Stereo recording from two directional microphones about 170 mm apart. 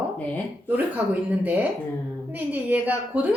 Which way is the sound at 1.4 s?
10° right (ahead or behind).